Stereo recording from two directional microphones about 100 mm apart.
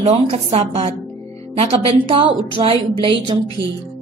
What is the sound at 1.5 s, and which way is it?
Speech, 70° right (ahead or behind).